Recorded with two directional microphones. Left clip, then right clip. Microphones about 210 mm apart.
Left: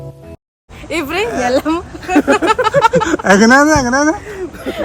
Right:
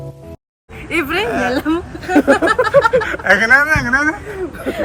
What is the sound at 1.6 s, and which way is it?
Speech, 35° left (ahead or behind).